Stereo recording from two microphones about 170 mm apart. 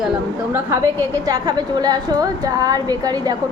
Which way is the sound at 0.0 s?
5° right (ahead or behind).